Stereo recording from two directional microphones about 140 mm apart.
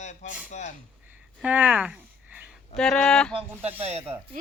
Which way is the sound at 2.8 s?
5° left (ahead or behind).